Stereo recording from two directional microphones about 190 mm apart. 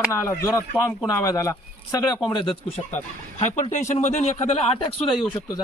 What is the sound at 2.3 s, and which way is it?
Speech, 30° left (ahead or behind).